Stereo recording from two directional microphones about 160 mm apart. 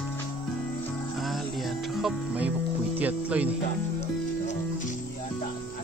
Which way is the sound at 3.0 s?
10° right (ahead or behind).